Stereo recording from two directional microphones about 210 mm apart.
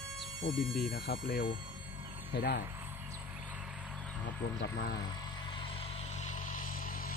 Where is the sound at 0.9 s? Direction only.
50° left (ahead or behind).